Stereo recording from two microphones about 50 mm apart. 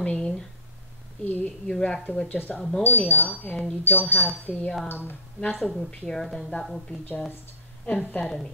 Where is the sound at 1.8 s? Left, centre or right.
Left.